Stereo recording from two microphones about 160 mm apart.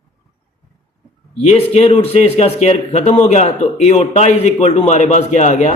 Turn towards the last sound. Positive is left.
turn(degrees=45)  # may be behind; listen again after turning